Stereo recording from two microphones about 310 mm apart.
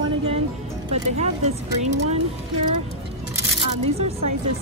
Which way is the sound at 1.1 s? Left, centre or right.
Right.